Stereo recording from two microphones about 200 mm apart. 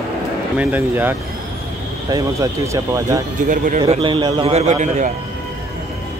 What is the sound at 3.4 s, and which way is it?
Speech, 40° right (ahead or behind).